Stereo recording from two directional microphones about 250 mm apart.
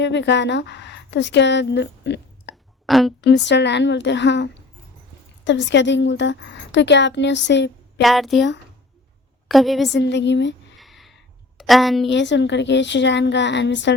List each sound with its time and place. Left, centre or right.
0.0 s a woman's voice: left
2.8 s a woman's voice: centre
3.2 s a woman's voice: left
8.0 s a woman's voice: centre
9.5 s a woman's voice: centre
9.9 s a woman's voice: left
10.8 s a sound: centre
12.1 s a woman's voice: left